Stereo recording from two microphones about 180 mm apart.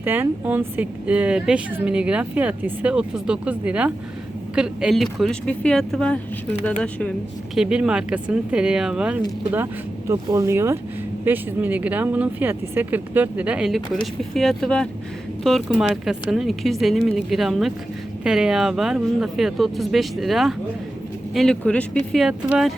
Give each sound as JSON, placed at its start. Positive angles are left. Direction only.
{"t": 0.0, "sound": "speech", "side_deg": -10}
{"t": 10.1, "sound": "speech", "side_deg": -15}